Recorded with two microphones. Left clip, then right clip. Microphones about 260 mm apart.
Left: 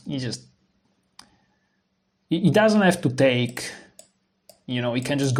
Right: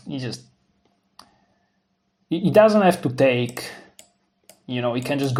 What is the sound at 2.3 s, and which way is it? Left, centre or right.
Speech, left.